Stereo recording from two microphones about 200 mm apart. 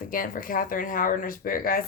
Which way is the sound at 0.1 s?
45° left (ahead or behind).